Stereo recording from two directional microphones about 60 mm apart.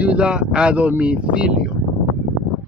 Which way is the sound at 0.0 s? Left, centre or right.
Centre.